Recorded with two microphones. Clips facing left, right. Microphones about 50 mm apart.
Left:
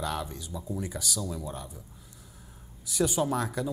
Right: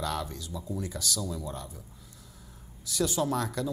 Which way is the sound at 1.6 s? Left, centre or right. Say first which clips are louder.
Even; centre.